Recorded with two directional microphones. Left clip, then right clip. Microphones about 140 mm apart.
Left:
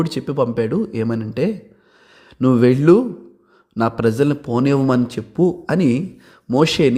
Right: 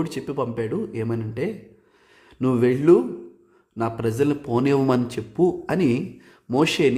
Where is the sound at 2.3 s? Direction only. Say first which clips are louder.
Left 6 dB; 30° left (ahead or behind).